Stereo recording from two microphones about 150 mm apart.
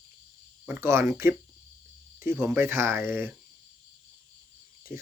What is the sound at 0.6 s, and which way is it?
Speech, 15° right (ahead or behind).